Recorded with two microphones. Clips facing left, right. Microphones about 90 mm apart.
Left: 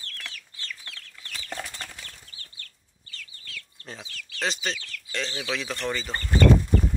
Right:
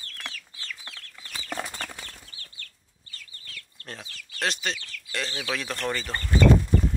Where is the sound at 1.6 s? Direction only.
45° right (ahead or behind).